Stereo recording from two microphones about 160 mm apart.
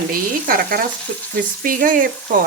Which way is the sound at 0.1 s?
65° right (ahead or behind).